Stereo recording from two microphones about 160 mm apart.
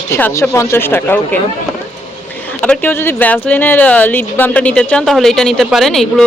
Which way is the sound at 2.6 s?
10° left (ahead or behind).